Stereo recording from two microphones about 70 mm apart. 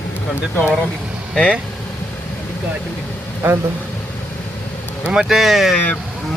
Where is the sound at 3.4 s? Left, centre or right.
Right.